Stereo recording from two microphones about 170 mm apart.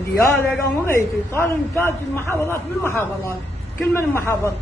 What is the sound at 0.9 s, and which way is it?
A man's voice, 15° left (ahead or behind).